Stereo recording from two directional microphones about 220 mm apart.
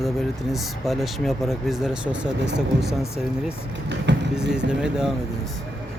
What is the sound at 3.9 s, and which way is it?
Vehicle, 55° right (ahead or behind).